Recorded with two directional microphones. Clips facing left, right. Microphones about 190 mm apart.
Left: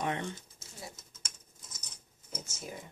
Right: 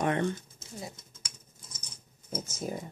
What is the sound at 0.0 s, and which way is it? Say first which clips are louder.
Speech: right 7 dB; 55° right (ahead or behind).